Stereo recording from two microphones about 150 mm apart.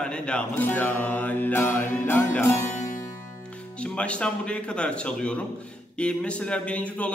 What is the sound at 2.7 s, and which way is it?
Music, 60° left (ahead or behind).